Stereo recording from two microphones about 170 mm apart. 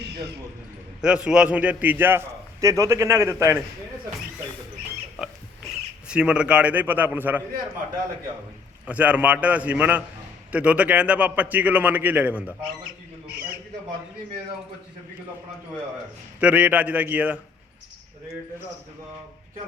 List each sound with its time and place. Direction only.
0.0 s a sound: 75° right (ahead or behind)
1.0 s a man's voice: 5° right (ahead or behind)
6.1 s a man's voice: 5° right (ahead or behind)
8.9 s a man's voice: 10° right (ahead or behind)
16.4 s a man's voice: 10° right (ahead or behind)